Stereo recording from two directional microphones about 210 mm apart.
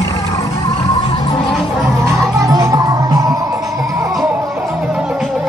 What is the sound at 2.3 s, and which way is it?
Music, 15° right (ahead or behind).